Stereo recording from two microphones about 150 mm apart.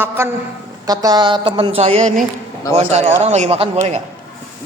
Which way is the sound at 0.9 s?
25° right (ahead or behind).